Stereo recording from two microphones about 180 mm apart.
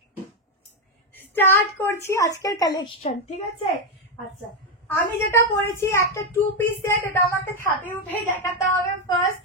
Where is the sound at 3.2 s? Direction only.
35° left (ahead or behind).